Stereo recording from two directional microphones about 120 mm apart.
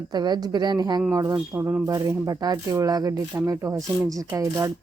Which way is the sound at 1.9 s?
30° right (ahead or behind).